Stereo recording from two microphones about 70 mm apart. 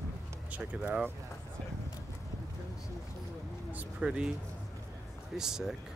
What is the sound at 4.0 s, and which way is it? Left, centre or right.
Speech, centre.